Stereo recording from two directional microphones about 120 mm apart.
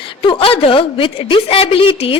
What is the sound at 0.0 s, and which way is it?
A woman's voice, 45° left (ahead or behind).